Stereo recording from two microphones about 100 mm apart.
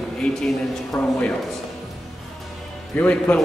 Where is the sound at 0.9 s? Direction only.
20° left (ahead or behind).